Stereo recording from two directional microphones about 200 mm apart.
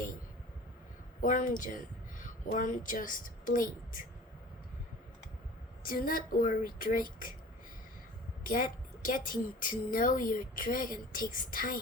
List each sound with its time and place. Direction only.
1.2 s a woman's voice: 40° left (ahead or behind)
5.8 s a woman's voice: 45° left (ahead or behind)
8.4 s a woman's voice: 45° left (ahead or behind)